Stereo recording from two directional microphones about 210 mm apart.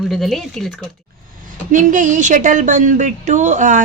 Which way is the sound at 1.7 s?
40° right (ahead or behind).